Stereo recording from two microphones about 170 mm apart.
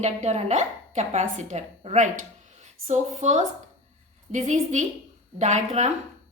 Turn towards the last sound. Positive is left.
turn(degrees=-40)  # may be behind; listen again after turning